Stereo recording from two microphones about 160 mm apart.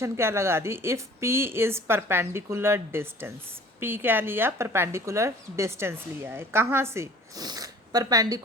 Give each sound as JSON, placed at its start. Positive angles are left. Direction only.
{"t": 0.0, "sound": "speech", "side_deg": -15}